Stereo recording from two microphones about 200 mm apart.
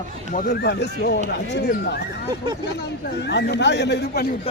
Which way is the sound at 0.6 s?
55° left (ahead or behind).